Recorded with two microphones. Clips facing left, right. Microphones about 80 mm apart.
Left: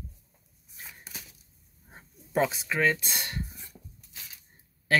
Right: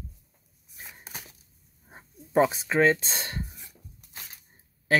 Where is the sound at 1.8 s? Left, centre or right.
Centre.